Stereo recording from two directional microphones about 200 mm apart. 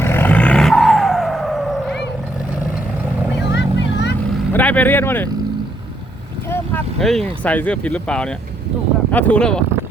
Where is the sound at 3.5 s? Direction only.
60° left (ahead or behind).